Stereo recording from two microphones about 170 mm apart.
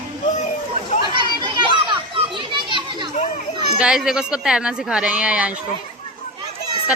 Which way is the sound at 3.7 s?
5° right (ahead or behind).